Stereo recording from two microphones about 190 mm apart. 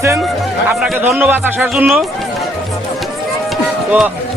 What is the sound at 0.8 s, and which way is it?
A man's voice, centre (ahead or behind).